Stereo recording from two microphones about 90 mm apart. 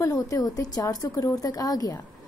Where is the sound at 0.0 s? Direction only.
40° left (ahead or behind).